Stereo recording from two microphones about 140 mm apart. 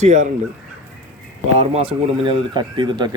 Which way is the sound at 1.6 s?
45° right (ahead or behind).